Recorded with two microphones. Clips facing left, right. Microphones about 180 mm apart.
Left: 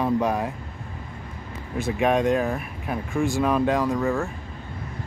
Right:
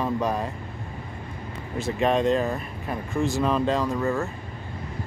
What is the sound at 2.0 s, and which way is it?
Speech, 10° left (ahead or behind).